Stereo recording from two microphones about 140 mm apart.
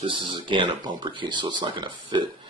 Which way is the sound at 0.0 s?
35° right (ahead or behind).